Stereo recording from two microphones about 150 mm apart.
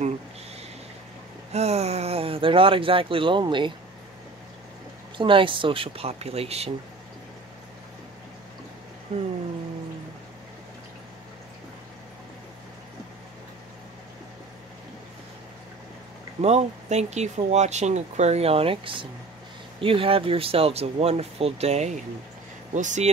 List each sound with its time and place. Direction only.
1.5 s speech: 45° right (ahead or behind)
5.1 s speech: 35° right (ahead or behind)
16.3 s speech: 45° right (ahead or behind)